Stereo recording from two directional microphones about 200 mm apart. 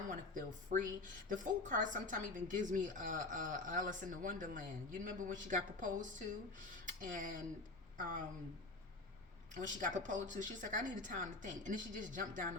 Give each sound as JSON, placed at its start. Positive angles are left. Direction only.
{"t": 0.1, "sound": "speech", "side_deg": -40}
{"t": 9.6, "sound": "speech", "side_deg": -40}